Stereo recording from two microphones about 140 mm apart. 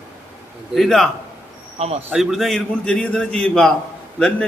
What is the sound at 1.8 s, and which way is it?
Speech, 50° right (ahead or behind).